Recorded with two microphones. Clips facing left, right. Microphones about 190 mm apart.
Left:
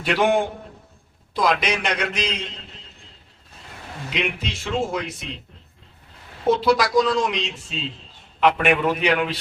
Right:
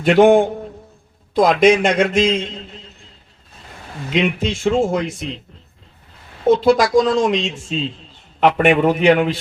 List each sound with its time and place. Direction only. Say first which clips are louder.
0.0 s speech: right 9 dB; 50° right (ahead or behind)
4.1 s speech: right 9 dB; 50° right (ahead or behind)
6.5 s speech: right 5 dB; 50° right (ahead or behind)